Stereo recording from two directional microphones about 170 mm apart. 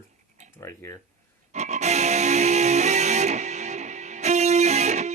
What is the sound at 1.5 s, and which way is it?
Music, 40° right (ahead or behind).